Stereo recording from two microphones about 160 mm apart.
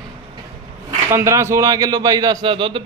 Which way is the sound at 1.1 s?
15° right (ahead or behind).